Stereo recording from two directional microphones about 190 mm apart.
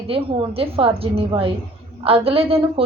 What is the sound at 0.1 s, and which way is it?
A woman's voice, 30° right (ahead or behind).